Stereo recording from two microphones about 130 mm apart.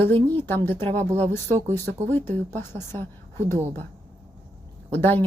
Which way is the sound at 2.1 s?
15° left (ahead or behind).